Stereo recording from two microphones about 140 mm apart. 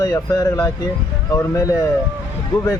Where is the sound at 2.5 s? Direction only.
25° left (ahead or behind).